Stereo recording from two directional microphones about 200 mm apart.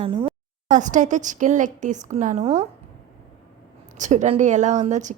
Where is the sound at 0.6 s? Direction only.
40° right (ahead or behind).